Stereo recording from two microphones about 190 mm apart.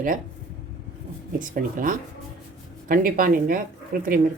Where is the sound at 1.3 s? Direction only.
45° right (ahead or behind).